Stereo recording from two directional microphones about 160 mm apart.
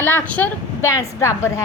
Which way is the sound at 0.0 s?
10° left (ahead or behind).